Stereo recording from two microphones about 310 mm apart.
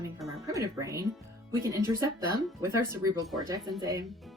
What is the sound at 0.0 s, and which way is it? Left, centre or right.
Music, centre.